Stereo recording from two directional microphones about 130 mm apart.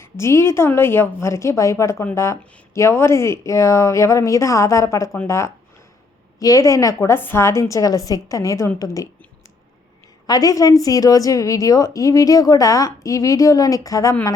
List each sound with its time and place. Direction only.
0.0 s a woman's voice: 20° left (ahead or behind)
10.2 s a woman's voice: 30° left (ahead or behind)